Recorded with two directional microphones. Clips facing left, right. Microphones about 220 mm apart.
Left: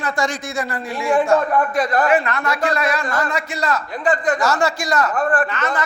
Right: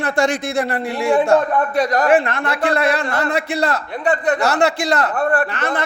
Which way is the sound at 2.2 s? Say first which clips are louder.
Right 1 dB; 55° right (ahead or behind).